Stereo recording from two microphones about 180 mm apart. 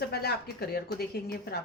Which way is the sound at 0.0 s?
60° left (ahead or behind).